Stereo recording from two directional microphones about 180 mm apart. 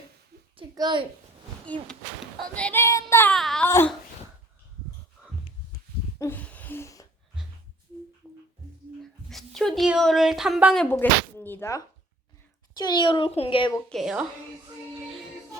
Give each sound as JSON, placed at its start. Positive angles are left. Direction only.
{"t": 0.5, "sound": "a sound", "side_deg": -25}
{"t": 1.7, "sound": "speech", "side_deg": 10}
{"t": 3.3, "sound": "speech", "side_deg": 0}
{"t": 3.7, "sound": "speech", "side_deg": 15}
{"t": 5.2, "sound": "wheeze", "side_deg": -5}
{"t": 6.1, "sound": "a sound", "side_deg": 10}
{"t": 8.2, "sound": "music", "side_deg": 0}
{"t": 9.3, "sound": "speech", "side_deg": 0}
{"t": 10.8, "sound": "a child's voice", "side_deg": 10}
{"t": 13.9, "sound": "speech", "side_deg": -5}